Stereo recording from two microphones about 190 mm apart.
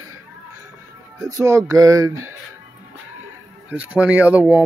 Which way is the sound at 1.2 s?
15° right (ahead or behind).